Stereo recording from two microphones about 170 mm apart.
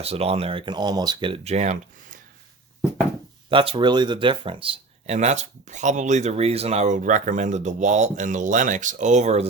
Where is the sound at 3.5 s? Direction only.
30° right (ahead or behind).